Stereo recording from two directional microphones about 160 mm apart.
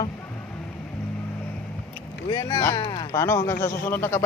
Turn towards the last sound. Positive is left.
turn(degrees=15)  # may be behind; listen again after turning